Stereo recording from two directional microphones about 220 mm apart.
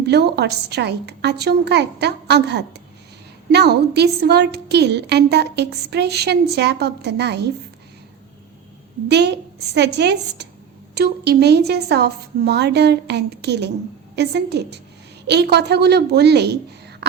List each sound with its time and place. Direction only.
0.0 s a woman's voice: 50° right (ahead or behind)
9.0 s a woman's voice: 50° right (ahead or behind)